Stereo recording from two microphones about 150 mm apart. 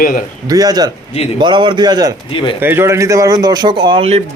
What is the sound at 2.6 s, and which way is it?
Speech, 15° right (ahead or behind).